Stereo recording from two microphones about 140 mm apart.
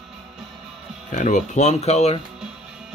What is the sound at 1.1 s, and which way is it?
Speech, 60° left (ahead or behind).